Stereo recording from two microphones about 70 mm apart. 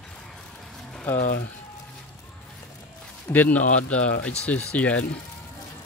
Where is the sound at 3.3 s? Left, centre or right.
Left.